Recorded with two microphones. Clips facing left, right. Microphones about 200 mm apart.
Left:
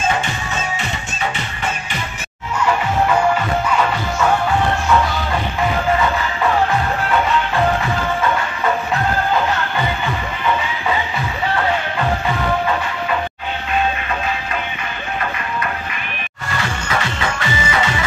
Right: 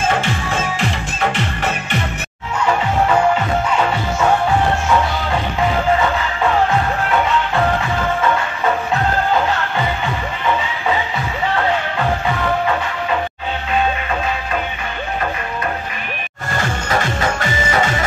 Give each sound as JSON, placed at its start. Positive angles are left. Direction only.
{"t": 0.1, "sound": "music", "side_deg": -55}
{"t": 0.7, "sound": "music", "side_deg": -65}
{"t": 16.4, "sound": "music", "side_deg": -45}